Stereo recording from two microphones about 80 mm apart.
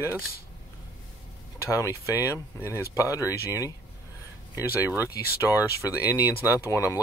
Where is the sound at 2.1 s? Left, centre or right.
Left.